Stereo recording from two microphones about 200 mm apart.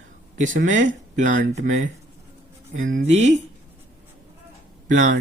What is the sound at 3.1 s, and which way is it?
Speech, 35° right (ahead or behind).